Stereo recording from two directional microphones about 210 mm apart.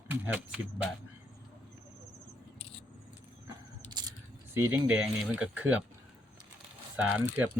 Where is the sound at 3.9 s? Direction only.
20° right (ahead or behind).